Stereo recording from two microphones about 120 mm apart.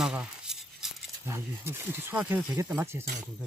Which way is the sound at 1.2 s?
20° right (ahead or behind).